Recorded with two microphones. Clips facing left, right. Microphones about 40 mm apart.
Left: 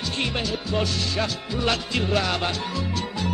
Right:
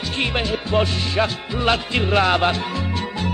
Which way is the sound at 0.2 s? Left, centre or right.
Right.